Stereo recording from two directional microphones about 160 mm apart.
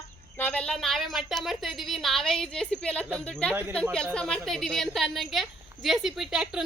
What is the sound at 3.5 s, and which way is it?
Speech, 10° right (ahead or behind).